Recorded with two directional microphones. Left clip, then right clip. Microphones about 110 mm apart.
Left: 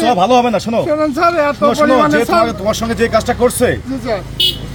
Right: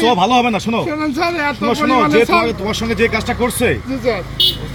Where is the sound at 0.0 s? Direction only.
45° left (ahead or behind).